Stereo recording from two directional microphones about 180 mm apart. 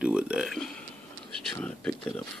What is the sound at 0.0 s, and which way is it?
Speech, 5° right (ahead or behind).